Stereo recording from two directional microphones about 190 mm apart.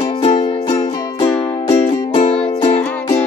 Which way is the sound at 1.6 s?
35° left (ahead or behind).